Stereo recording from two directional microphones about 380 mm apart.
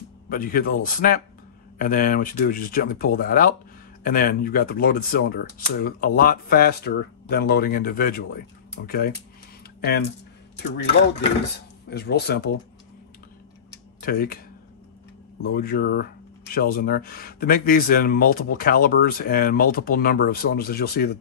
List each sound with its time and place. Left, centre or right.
0.3 s speech: left
11.9 s speech: left
13.7 s tick-tock: left
15.5 s speech: left